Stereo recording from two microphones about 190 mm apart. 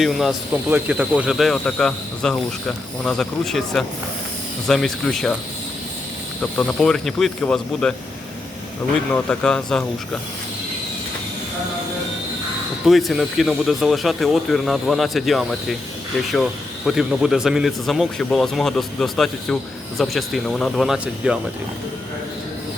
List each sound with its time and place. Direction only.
0.0 s speech: centre (ahead or behind)
6.4 s speech: 5° left (ahead or behind)
9.1 s speech: 5° left (ahead or behind)
12.8 s speech: centre (ahead or behind)